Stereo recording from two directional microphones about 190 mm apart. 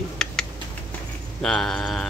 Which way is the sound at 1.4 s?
5° left (ahead or behind).